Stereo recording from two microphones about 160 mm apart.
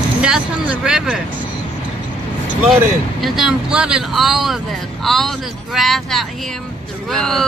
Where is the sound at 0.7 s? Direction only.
5° right (ahead or behind).